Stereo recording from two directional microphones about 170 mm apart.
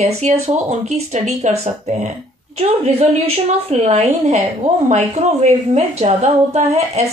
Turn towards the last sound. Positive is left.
turn(degrees=-40)  # may be behind; listen again after turning